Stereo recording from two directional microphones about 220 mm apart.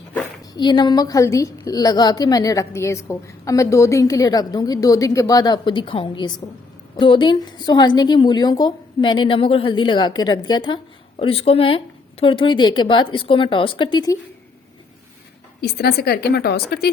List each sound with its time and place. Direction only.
0.5 s a woman's voice: 20° left (ahead or behind)
15.6 s a woman's voice: 45° left (ahead or behind)